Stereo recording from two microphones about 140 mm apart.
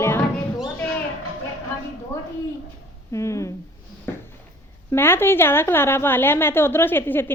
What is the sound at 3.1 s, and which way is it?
Speech, 20° left (ahead or behind).